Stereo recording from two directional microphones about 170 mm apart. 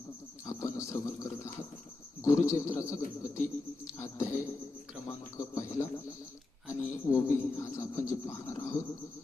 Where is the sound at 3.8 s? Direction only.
15° left (ahead or behind).